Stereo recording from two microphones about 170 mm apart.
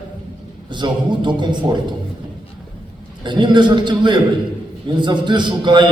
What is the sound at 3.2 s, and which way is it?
A man's voice, 25° right (ahead or behind).